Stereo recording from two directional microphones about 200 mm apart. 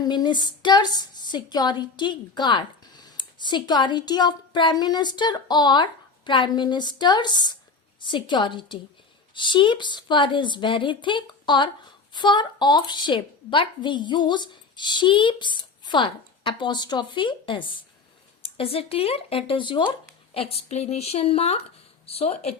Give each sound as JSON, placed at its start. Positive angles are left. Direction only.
{"t": 0.0, "sound": "a woman's voice", "side_deg": 20}